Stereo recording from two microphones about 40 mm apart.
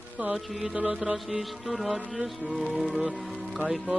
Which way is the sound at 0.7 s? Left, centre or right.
Right.